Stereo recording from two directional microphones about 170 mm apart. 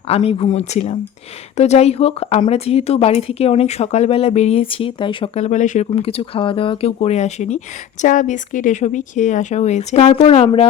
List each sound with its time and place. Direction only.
0.1 s speech: 35° left (ahead or behind)
5.9 s speech: 35° left (ahead or behind)